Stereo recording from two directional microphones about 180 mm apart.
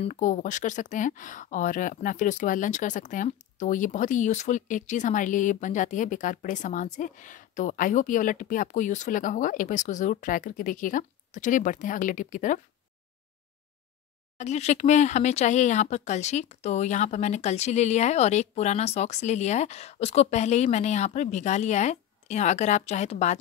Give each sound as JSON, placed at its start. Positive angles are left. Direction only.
{"t": 0.0, "sound": "speech", "side_deg": 45}
{"t": 14.4, "sound": "speech", "side_deg": 40}